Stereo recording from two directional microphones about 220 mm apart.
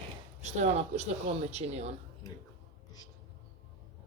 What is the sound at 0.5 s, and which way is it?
Speech, 30° right (ahead or behind).